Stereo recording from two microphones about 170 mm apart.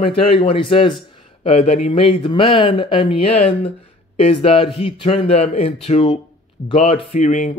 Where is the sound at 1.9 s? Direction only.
30° left (ahead or behind).